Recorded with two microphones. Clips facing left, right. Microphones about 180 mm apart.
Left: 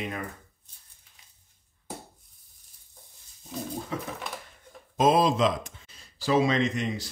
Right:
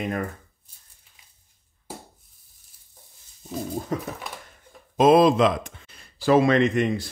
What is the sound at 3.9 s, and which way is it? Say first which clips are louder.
Speech: right 6 dB; 45° right (ahead or behind).